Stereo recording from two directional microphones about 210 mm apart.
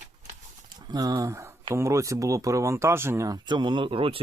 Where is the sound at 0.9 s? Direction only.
15° right (ahead or behind).